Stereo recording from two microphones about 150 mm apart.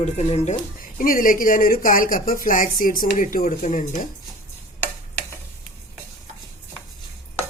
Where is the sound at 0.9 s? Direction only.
65° left (ahead or behind).